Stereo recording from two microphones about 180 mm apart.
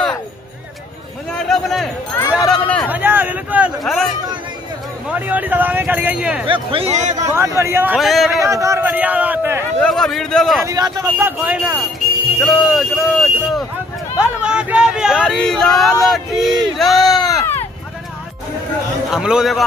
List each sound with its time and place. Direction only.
1.3 s a sound: centre (ahead or behind)
2.9 s speech: 10° right (ahead or behind)
5.1 s speech: 10° right (ahead or behind)
6.4 s speech: 30° right (ahead or behind)
7.2 s speech: 15° right (ahead or behind)
8.0 s speech: centre (ahead or behind)
8.4 s speech: 15° right (ahead or behind)
9.8 s speech: centre (ahead or behind)
10.6 s speech: 20° right (ahead or behind); by 16.5 s centre (ahead or behind)
16.7 s a sound: centre (ahead or behind)
19.0 s speech: 5° right (ahead or behind)